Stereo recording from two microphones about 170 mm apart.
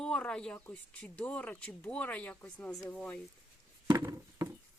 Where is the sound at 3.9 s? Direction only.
20° right (ahead or behind).